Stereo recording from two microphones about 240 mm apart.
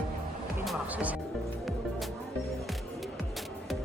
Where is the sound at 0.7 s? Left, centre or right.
Centre.